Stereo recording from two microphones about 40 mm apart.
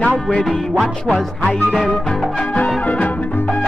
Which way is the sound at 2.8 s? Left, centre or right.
Left.